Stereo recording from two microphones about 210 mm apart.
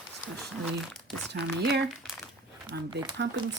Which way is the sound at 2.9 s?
20° right (ahead or behind).